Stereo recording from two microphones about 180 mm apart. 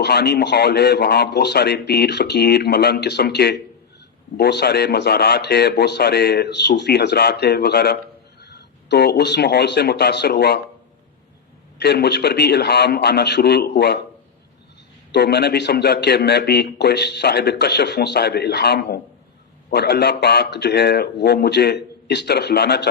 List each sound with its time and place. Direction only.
0.0 s a man's voice: 65° left (ahead or behind)
11.8 s a man's voice: 65° left (ahead or behind)
15.1 s a man's voice: 65° left (ahead or behind)